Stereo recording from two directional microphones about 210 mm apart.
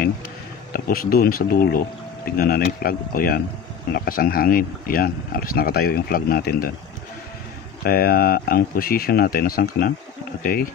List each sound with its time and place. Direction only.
0.7 s speech: 45° left (ahead or behind)
7.8 s speech: 45° left (ahead or behind)